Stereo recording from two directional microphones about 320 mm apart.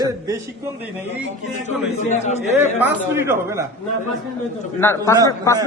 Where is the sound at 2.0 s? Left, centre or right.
Left.